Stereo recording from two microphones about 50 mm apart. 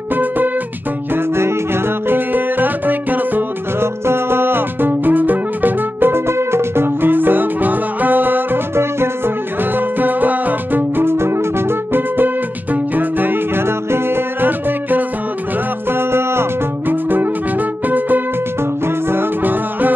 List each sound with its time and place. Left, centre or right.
0.1 s music: right
1.1 s music: right
3.8 s music: right
8.7 s music: right
15.9 s music: right
16.8 s music: right